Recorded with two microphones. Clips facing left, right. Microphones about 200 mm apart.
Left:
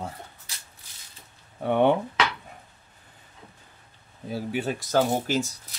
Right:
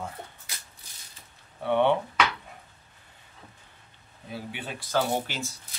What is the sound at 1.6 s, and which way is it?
Speech, 45° left (ahead or behind).